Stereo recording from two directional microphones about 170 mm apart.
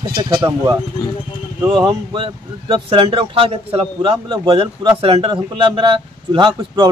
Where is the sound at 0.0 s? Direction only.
25° right (ahead or behind).